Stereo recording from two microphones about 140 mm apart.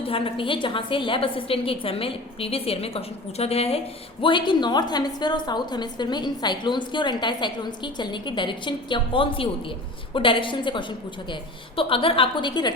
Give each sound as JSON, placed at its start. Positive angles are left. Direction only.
{"t": 0.0, "sound": "a woman's voice", "side_deg": 40}
{"t": 4.2, "sound": "a woman's voice", "side_deg": 35}